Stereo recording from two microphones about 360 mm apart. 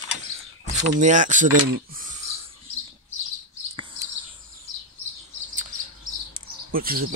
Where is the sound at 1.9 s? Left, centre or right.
Right.